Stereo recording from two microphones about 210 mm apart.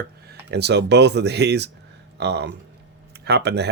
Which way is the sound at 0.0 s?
50° right (ahead or behind).